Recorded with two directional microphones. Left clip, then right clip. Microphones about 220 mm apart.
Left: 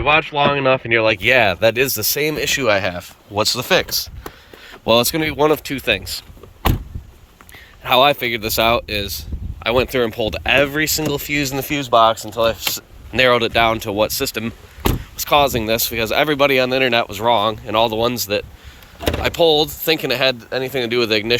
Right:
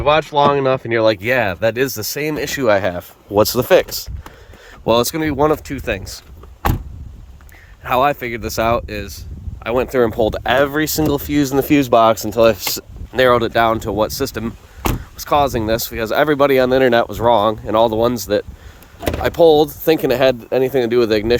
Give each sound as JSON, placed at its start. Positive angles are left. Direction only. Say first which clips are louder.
{"t": 0.0, "sound": "speech", "louder": "right 2 dB", "side_deg": -30}
{"t": 4.8, "sound": "speech", "louder": "even", "side_deg": -25}
{"t": 7.9, "sound": "speech", "louder": "left 2 dB", "side_deg": -20}
{"t": 13.1, "sound": "speech", "louder": "right 1 dB", "side_deg": -30}